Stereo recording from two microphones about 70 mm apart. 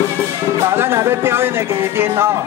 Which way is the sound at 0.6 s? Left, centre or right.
Right.